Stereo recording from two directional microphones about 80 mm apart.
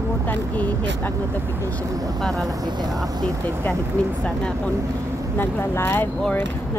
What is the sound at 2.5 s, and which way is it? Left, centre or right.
Speech, right.